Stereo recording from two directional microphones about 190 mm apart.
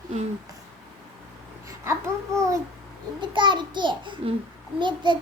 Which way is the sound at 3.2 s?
25° right (ahead or behind).